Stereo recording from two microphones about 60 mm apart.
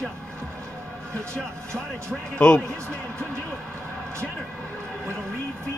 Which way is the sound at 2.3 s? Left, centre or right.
Centre.